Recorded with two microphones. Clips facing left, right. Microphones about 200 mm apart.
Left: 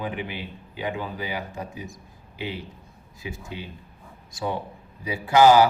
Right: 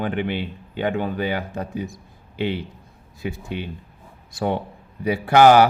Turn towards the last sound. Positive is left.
turn(degrees=-65)  # may be behind; listen again after turning